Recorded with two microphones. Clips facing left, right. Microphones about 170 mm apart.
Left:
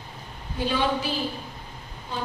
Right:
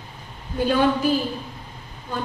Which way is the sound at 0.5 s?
50° right (ahead or behind).